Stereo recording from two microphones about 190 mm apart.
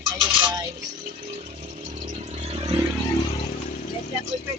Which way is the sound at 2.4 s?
30° right (ahead or behind).